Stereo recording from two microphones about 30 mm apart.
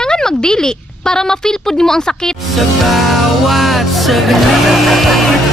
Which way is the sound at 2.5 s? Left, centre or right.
Centre.